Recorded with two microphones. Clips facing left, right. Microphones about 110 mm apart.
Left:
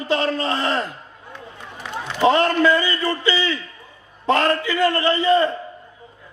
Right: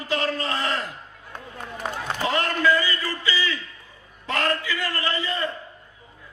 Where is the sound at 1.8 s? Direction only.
45° right (ahead or behind).